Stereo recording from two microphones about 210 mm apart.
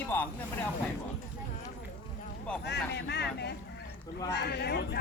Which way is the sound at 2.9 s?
55° left (ahead or behind).